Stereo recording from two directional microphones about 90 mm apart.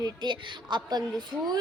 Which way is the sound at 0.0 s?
55° right (ahead or behind).